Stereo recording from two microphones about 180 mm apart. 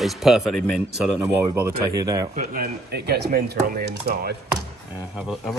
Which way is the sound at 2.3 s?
55° right (ahead or behind).